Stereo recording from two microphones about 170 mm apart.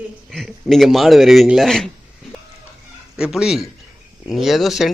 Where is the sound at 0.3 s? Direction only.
Centre (ahead or behind).